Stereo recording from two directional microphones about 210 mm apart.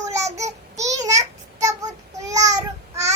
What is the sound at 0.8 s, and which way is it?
Child singing, 15° right (ahead or behind).